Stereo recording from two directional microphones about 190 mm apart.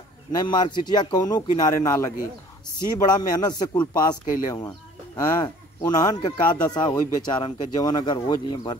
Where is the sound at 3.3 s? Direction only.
20° left (ahead or behind).